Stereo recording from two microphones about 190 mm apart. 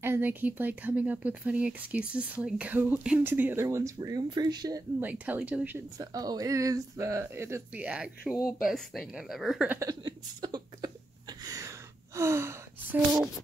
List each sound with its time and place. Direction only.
0.0 s speech: 10° right (ahead or behind)
5.0 s speech: 5° right (ahead or behind)
5.9 s speech: 20° right (ahead or behind); by 9.8 s 5° right (ahead or behind)
9.8 s a sound: 20° right (ahead or behind)
12.2 s speech: 15° right (ahead or behind)